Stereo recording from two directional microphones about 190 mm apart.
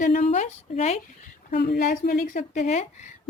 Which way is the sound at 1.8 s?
40° left (ahead or behind).